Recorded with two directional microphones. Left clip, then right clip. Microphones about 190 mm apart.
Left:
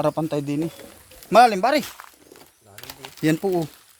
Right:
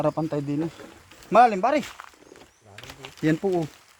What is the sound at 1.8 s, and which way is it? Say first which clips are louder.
Speech: left 1 dB; 20° left (ahead or behind).